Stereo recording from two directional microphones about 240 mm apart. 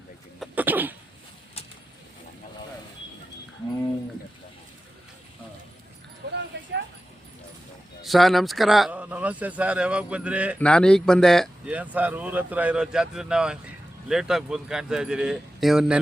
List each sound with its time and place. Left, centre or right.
0.3 s cough: centre
8.0 s speech: centre